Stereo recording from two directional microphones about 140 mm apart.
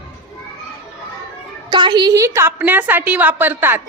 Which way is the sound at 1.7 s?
35° right (ahead or behind).